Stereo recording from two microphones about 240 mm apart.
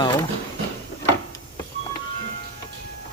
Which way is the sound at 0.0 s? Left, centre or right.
Centre.